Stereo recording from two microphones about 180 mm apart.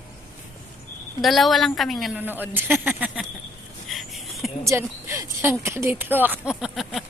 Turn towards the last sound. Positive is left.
turn(degrees=0)  # may be behind; listen again after turning